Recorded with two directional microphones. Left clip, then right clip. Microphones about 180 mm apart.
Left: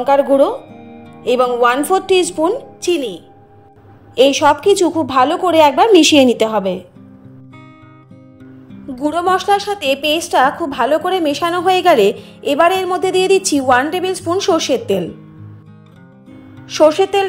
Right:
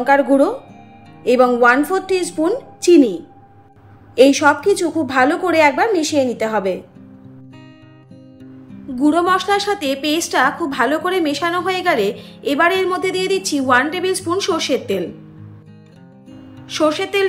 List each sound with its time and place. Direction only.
0.0 s a woman's voice: 55° left (ahead or behind)
8.9 s a woman's voice: 40° left (ahead or behind)
16.6 s speech: 35° left (ahead or behind)